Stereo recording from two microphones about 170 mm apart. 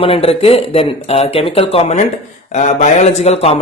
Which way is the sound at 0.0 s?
35° left (ahead or behind).